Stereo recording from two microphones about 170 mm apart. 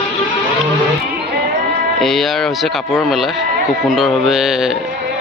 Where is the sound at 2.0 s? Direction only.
Centre (ahead or behind).